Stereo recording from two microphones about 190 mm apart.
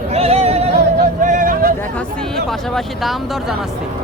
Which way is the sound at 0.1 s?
30° right (ahead or behind).